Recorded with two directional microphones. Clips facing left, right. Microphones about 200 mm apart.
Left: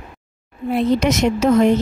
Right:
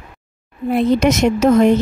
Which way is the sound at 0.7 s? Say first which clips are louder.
Right 3 dB; 50° right (ahead or behind).